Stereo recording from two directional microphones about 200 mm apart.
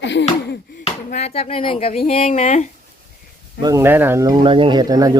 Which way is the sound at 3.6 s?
15° right (ahead or behind).